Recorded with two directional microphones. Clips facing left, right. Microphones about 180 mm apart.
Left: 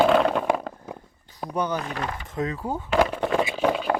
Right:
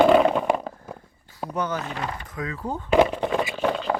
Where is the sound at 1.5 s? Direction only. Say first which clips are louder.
Left 1 dB; 15° left (ahead or behind).